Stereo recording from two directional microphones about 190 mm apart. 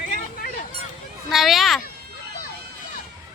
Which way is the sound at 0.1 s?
50° left (ahead or behind).